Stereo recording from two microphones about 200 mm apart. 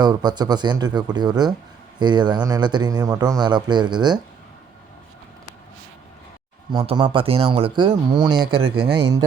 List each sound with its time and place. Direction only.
0.0 s a man's voice: 20° right (ahead or behind)
6.7 s a man's voice: 20° right (ahead or behind)